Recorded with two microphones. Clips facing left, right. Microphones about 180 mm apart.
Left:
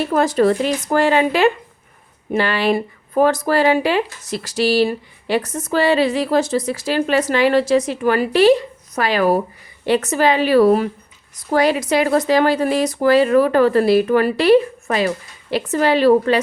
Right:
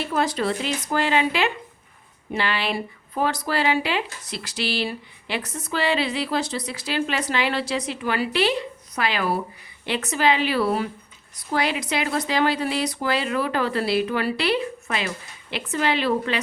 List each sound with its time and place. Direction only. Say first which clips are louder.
0.0 s speech: left 8 dB; 45° left (ahead or behind)